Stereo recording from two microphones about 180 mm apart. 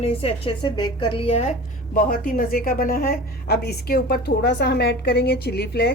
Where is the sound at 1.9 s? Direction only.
50° left (ahead or behind).